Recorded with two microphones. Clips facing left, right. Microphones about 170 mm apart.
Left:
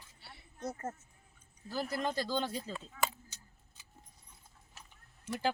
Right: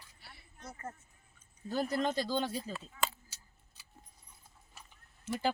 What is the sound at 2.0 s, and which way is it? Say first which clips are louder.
Speech: right 1 dB; 15° right (ahead or behind).